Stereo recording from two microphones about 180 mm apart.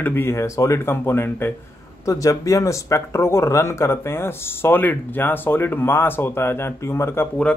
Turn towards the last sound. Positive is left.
turn(degrees=10)  # may be behind; listen again after turning